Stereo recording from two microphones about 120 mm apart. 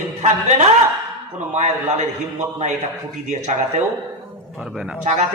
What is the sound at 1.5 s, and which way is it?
Speech, 85° right.